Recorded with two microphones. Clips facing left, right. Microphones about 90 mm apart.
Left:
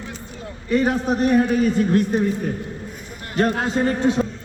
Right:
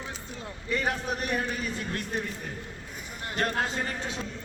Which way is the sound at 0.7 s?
30° left (ahead or behind).